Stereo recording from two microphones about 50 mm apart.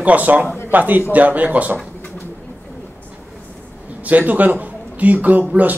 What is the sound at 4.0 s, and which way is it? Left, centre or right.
A man's voice, right.